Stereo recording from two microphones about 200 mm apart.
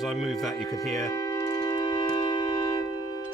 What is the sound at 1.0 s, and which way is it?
Music, 20° left (ahead or behind).